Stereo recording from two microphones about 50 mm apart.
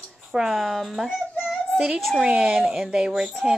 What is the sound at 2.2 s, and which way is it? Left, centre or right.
Speech, centre.